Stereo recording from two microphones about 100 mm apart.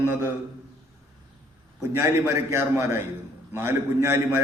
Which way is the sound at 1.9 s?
30° right (ahead or behind).